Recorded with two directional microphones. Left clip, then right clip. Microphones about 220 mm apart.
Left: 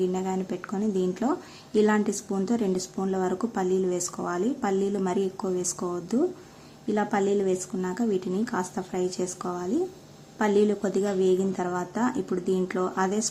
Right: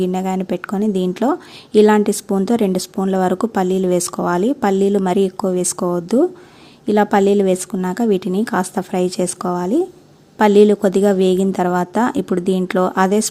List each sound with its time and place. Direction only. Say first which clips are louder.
0.0 s a woman's voice: right 8 dB; 40° right (ahead or behind)